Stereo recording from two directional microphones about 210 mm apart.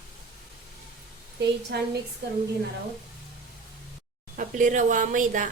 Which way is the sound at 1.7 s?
50° right (ahead or behind).